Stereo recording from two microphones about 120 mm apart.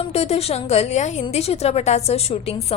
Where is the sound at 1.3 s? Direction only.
60° left (ahead or behind).